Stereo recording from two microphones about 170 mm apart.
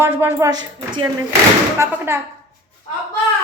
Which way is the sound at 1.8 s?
15° right (ahead or behind).